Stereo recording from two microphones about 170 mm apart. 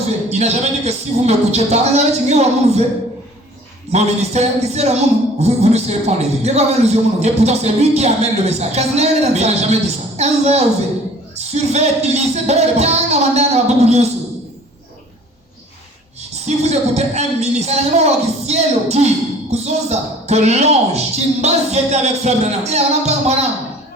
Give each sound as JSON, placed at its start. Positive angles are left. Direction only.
{"t": 0.3, "sound": "speech", "side_deg": -40}
{"t": 3.9, "sound": "speech", "side_deg": -40}
{"t": 16.3, "sound": "speech", "side_deg": -40}